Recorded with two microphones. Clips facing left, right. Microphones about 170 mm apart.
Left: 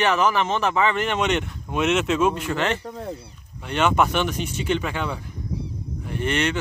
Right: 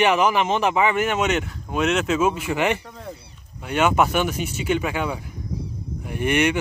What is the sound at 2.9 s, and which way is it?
Speech, 35° left (ahead or behind).